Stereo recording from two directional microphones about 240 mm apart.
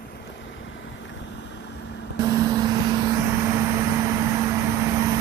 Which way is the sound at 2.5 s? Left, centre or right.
Centre.